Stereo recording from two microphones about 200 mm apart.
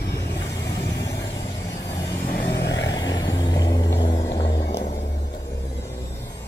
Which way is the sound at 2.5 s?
60° left (ahead or behind).